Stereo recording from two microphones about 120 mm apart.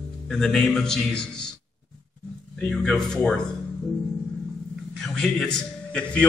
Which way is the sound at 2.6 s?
Centre (ahead or behind).